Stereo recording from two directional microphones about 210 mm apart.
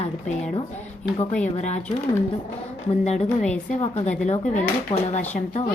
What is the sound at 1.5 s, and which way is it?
Speech, 35° left (ahead or behind).